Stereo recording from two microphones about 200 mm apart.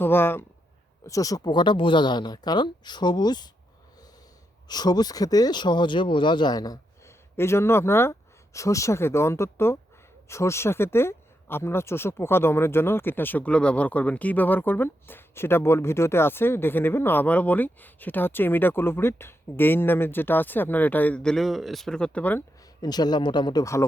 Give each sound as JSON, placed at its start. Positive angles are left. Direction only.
{"t": 0.0, "sound": "speech", "side_deg": 10}
{"t": 4.7, "sound": "speech", "side_deg": 20}
{"t": 22.8, "sound": "speech", "side_deg": 20}